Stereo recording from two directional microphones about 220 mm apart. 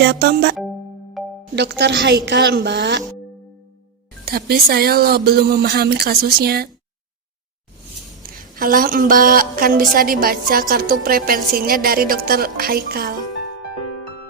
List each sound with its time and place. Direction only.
0.0 s speech: 50° right (ahead or behind)
1.2 s music: centre (ahead or behind)
1.5 s speech: 50° right (ahead or behind)
4.3 s speech: 45° right (ahead or behind)
8.5 s a woman's voice: 40° right (ahead or behind)